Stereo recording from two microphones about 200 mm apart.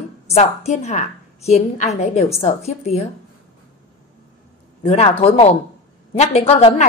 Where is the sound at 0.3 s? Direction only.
35° left (ahead or behind).